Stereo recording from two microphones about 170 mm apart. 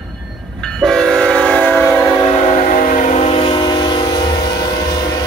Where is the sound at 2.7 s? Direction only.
50° left (ahead or behind).